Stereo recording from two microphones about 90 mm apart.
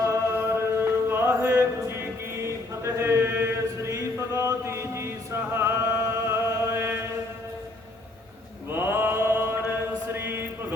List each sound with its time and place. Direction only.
0.0 s music: 30° right (ahead or behind)
8.7 s mantra: 25° right (ahead or behind)